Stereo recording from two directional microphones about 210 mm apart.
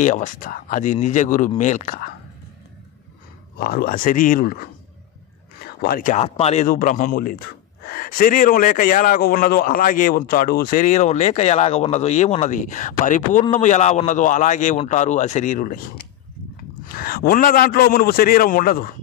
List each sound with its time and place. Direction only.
0.0 s a man's voice: 35° left (ahead or behind)
3.5 s a man's voice: 45° left (ahead or behind)
5.8 s a man's voice: 45° left (ahead or behind)